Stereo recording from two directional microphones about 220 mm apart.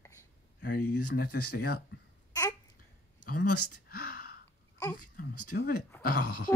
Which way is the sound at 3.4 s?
90° left.